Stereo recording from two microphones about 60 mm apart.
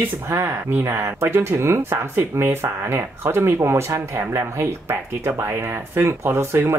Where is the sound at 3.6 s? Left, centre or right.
Right.